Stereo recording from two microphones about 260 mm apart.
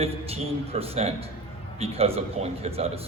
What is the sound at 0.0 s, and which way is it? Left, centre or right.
A man's voice, right.